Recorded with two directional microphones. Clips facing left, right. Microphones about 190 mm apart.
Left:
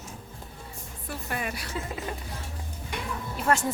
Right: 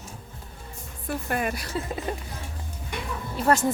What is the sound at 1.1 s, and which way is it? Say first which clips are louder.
Speech: right 6 dB; 50° right (ahead or behind).